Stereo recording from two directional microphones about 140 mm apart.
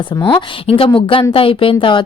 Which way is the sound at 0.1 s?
35° left (ahead or behind).